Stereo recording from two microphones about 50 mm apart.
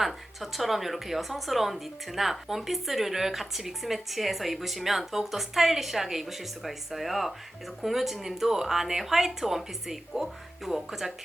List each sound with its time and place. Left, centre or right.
0.0 s a woman's voice: centre